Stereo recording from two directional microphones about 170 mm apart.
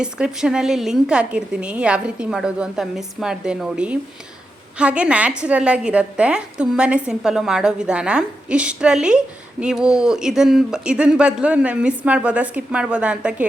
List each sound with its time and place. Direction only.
0.0 s a woman's voice: 5° right (ahead or behind)